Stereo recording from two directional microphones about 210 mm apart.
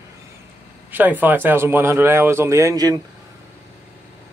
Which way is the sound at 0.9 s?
10° right (ahead or behind).